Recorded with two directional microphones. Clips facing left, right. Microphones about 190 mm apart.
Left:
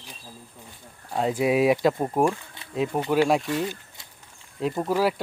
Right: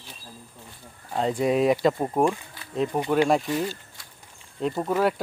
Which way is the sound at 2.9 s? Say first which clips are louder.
Even; centre (ahead or behind).